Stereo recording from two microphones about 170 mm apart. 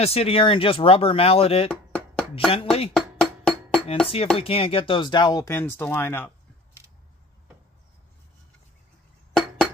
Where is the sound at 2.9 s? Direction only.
5° left (ahead or behind).